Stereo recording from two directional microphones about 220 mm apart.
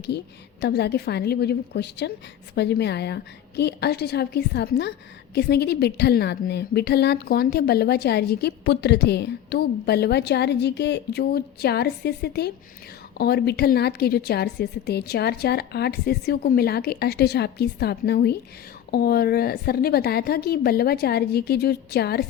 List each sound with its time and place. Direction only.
0.6 s a woman's voice: 50° left (ahead or behind)